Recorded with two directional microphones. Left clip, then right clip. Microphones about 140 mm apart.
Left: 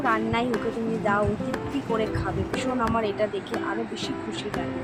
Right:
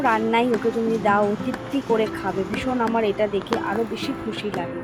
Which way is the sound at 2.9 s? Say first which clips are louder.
Right 4 dB; 20° right (ahead or behind).